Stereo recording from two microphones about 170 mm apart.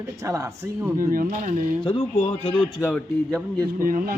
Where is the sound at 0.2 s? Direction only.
20° right (ahead or behind).